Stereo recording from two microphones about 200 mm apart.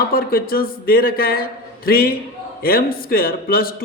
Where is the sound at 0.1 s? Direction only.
45° left (ahead or behind).